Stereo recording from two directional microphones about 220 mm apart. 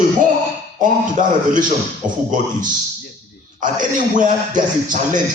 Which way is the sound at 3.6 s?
35° right (ahead or behind).